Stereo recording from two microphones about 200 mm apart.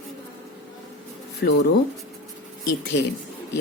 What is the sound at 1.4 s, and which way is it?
Speech, 55° left (ahead or behind).